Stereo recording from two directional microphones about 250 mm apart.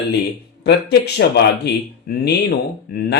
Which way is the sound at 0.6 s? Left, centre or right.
Left.